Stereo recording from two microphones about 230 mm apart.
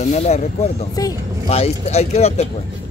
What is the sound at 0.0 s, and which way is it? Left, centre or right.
Speech, left.